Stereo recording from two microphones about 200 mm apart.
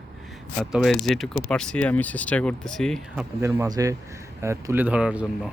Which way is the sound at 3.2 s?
15° right (ahead or behind).